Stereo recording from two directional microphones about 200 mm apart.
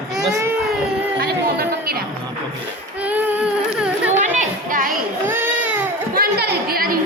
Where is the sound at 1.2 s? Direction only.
50° right (ahead or behind).